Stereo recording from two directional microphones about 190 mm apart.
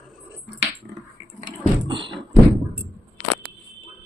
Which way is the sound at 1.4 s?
40° right (ahead or behind).